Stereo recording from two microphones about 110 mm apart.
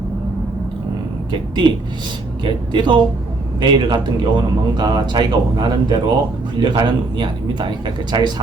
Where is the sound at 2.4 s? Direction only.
45° right (ahead or behind).